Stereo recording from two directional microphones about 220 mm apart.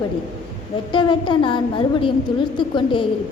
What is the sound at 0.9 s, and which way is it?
A woman's voice, 20° left (ahead or behind).